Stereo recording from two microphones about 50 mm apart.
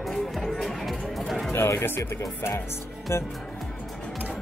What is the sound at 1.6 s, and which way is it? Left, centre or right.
Speech, left.